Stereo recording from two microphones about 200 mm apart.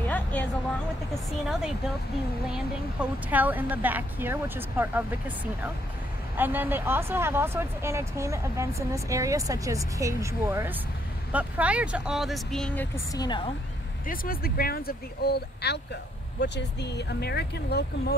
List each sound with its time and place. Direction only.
0.0 s a sound: 10° left (ahead or behind)
2.5 s speech: 5° right (ahead or behind); by 13.4 s 20° left (ahead or behind)
14.0 s speech: 45° left (ahead or behind)